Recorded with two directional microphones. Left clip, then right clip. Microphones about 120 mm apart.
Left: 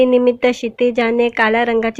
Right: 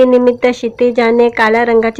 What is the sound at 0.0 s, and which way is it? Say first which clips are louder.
Speech: right 4 dB; 25° left (ahead or behind).